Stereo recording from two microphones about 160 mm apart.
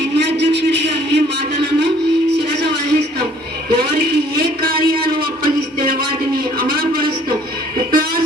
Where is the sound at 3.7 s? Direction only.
80° right.